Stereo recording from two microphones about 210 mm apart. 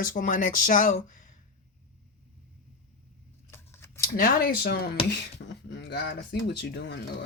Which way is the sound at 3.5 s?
10° left (ahead or behind).